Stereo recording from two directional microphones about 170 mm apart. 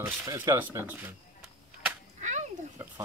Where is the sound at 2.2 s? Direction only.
45° right (ahead or behind).